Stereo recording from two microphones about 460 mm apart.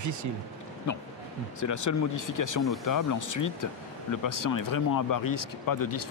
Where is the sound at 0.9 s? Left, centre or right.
Left.